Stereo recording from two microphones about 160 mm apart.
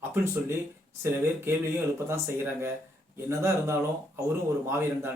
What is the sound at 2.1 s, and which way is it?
A man's voice, 15° right (ahead or behind).